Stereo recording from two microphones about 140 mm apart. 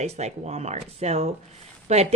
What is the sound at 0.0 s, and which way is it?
Speech, 50° right (ahead or behind).